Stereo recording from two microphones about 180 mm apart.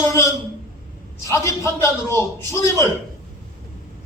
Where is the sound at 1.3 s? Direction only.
15° left (ahead or behind).